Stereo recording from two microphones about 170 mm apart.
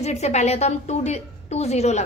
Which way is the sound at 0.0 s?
40° left (ahead or behind).